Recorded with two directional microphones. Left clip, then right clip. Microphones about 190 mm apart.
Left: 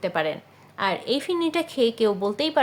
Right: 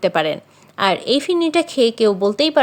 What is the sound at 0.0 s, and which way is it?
A woman's voice, 35° right (ahead or behind).